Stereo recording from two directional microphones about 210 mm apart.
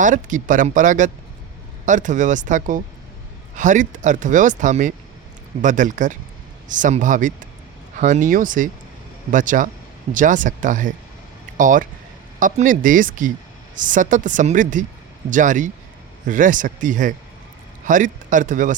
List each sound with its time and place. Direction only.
0.0 s speech: 40° right (ahead or behind)